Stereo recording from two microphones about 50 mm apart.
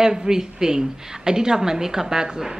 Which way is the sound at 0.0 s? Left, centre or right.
Centre.